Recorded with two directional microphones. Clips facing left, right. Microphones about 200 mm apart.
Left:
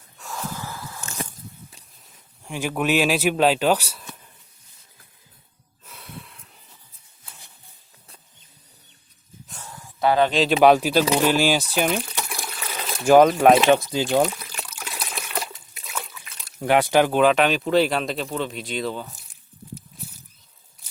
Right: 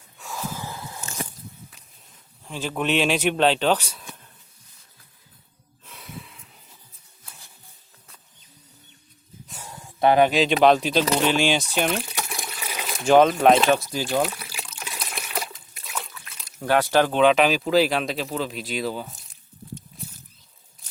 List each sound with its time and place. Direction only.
0.2 s snort: centre (ahead or behind)
0.6 s a sound: 20° right (ahead or behind)
2.4 s speech: 15° left (ahead or behind)
5.8 s snort: centre (ahead or behind)
9.6 s a sound: 25° right (ahead or behind)
10.3 s speech: centre (ahead or behind)
12.0 s water: 10° right (ahead or behind)
13.1 s speech: 5° left (ahead or behind)
14.2 s liquid: 10° right (ahead or behind)
15.1 s water: centre (ahead or behind)
16.6 s speech: 15° left (ahead or behind); by 19.2 s 5° right (ahead or behind)